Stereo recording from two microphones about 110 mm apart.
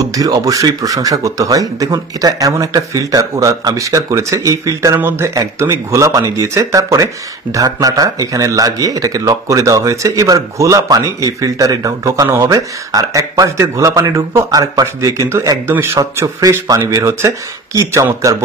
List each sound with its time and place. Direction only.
0.0 s speech: 35° right (ahead or behind)